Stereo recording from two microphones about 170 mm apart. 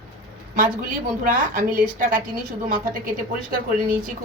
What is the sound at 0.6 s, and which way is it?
A woman's voice, 55° right (ahead or behind).